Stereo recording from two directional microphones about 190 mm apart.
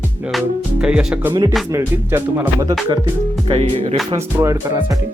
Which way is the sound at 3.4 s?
30° right (ahead or behind).